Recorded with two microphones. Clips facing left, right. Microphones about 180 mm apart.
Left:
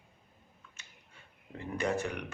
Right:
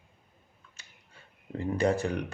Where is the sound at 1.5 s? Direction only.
35° right (ahead or behind).